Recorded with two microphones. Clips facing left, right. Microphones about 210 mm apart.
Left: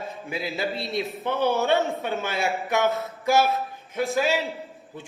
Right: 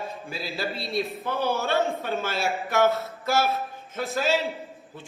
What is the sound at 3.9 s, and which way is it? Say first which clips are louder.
Speech: left 2 dB; 15° left (ahead or behind).